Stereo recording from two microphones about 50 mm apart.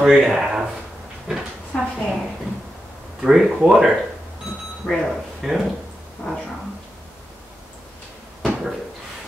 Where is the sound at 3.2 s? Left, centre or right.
Centre.